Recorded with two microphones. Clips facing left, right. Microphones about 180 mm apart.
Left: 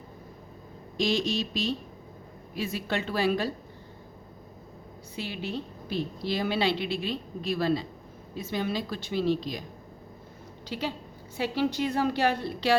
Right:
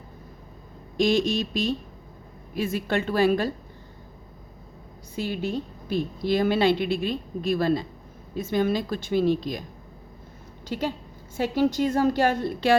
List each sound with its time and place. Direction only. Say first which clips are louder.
0.9 s a woman's voice: right 5 dB; 50° right (ahead or behind)
5.1 s a woman's voice: right 6 dB; 45° right (ahead or behind)
10.7 s a woman's voice: right 4 dB; 45° right (ahead or behind)